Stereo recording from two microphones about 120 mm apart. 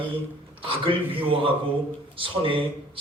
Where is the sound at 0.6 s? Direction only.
50° right (ahead or behind).